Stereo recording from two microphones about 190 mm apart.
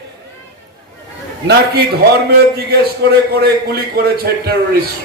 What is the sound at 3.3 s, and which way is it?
A man's voice, 55° right (ahead or behind).